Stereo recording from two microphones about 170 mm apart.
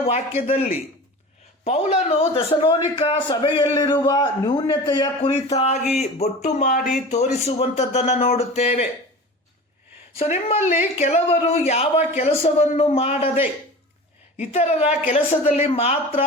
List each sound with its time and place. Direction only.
0.0 s a man's voice: 35° left (ahead or behind)
5.3 s speech: 40° left (ahead or behind)
10.2 s speech: 40° left (ahead or behind)
14.3 s speech: 40° left (ahead or behind)